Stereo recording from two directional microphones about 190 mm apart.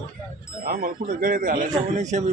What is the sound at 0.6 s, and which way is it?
A man's voice, 50° right (ahead or behind).